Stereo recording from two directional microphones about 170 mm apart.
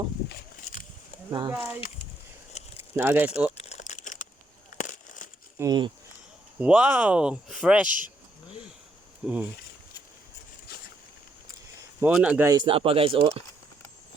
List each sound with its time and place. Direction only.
1.3 s speech: 25° right (ahead or behind)
2.5 s a sound: 40° left (ahead or behind)
2.9 s speech: 10° right (ahead or behind)
3.5 s crumpling: 40° left (ahead or behind)
5.5 s speech: 25° right (ahead or behind)
6.6 s speech: 5° right (ahead or behind)
7.9 s speech: 50° right (ahead or behind)
9.2 s speech: 5° right (ahead or behind)
11.9 s speech: 10° right (ahead or behind)
12.5 s speech: 30° right (ahead or behind)